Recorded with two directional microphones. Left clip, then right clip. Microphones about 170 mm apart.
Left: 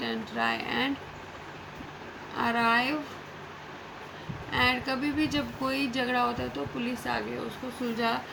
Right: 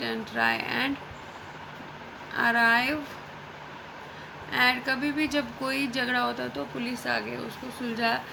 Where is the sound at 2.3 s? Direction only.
50° right (ahead or behind).